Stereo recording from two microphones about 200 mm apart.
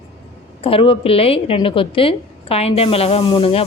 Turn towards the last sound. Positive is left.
turn(degrees=30)  # may be behind; listen again after turning